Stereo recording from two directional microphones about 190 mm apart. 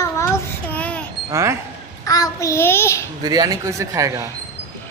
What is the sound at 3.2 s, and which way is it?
Speech, 20° right (ahead or behind).